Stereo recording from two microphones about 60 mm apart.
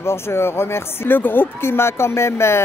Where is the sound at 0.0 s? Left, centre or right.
Left.